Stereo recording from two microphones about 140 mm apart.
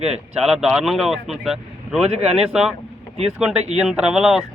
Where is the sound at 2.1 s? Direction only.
50° right (ahead or behind).